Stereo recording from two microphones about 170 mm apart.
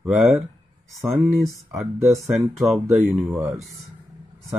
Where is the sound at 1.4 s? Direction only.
Centre (ahead or behind).